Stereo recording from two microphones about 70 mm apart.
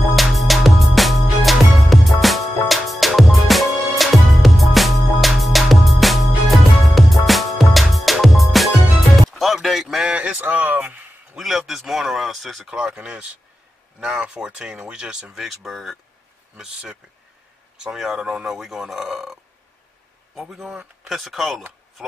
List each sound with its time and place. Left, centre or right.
0.1 s music: centre
9.3 s a sound: centre
10.1 s speech: centre
11.3 s speech: centre
12.7 s speech: centre
17.9 s speech: centre
20.3 s speech: centre
20.6 s speech: centre
21.1 s speech: centre